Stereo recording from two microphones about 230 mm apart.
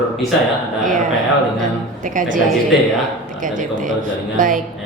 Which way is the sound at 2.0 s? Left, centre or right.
Right.